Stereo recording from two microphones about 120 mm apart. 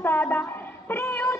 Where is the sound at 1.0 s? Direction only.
20° left (ahead or behind).